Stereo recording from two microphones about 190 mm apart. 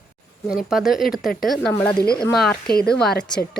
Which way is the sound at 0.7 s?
Centre (ahead or behind).